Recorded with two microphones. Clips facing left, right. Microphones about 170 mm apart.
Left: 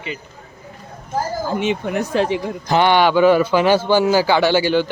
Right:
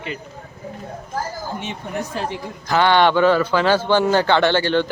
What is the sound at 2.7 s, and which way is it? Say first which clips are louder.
Speech: left 1 dB; 15° left (ahead or behind).